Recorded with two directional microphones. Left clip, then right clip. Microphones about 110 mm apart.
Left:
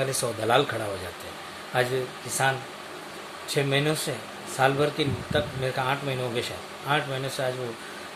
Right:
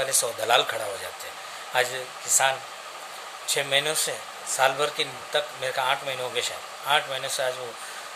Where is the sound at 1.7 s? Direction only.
10° right (ahead or behind).